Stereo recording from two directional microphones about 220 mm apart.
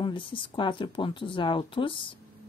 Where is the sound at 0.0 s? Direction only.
20° left (ahead or behind).